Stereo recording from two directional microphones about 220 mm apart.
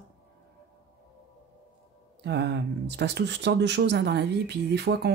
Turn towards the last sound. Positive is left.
turn(degrees=-50)  # may be behind; listen again after turning